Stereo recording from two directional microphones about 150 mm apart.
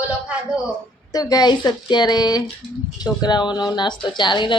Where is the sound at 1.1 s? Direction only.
25° left (ahead or behind).